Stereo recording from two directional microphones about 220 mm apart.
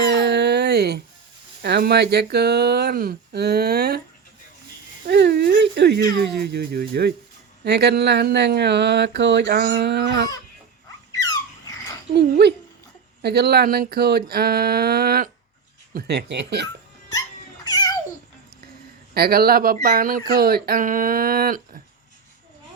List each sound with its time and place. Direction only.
0.0 s music: 50° right (ahead or behind)
1.6 s speech: 50° right (ahead or behind)
5.0 s speech: 50° right (ahead or behind)
11.1 s squeak: 15° left (ahead or behind)
12.1 s speech: 50° right (ahead or behind)
17.1 s dog: 15° left (ahead or behind)
19.1 s speech: 45° right (ahead or behind)